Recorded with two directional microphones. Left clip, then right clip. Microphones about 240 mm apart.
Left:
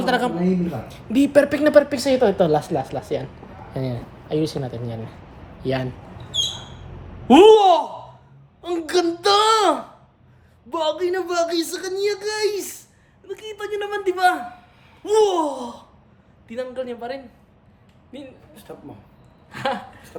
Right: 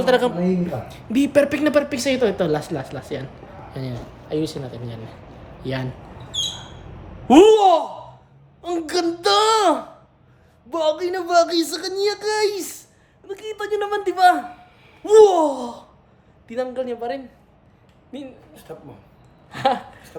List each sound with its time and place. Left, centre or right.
0.0 s speech: centre
3.7 s a man's voice: centre
4.3 s speech: left
5.6 s speech: centre
7.3 s speech: centre
8.9 s speech: centre
19.5 s a sound: centre